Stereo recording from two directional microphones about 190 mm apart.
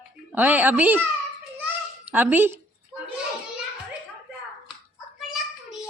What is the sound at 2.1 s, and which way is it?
Speech, 10° right (ahead or behind).